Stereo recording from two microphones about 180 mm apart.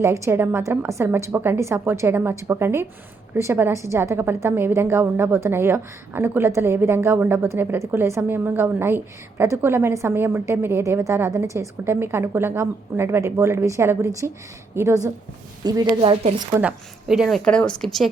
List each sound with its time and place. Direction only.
0.0 s a woman's voice: 15° right (ahead or behind)
16.6 s a woman's voice: 5° right (ahead or behind)